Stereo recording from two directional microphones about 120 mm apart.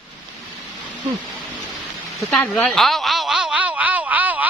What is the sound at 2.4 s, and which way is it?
Snicker, 10° left (ahead or behind).